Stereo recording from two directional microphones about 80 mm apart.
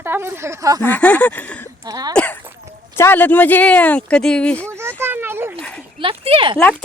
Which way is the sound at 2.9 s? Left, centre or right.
Left.